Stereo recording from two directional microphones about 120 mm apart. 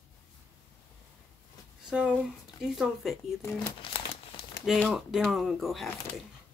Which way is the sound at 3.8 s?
45° left (ahead or behind).